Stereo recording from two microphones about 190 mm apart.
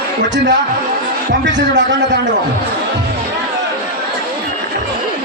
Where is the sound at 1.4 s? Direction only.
70° right (ahead or behind).